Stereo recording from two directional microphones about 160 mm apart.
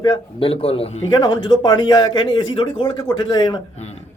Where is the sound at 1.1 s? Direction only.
25° left (ahead or behind).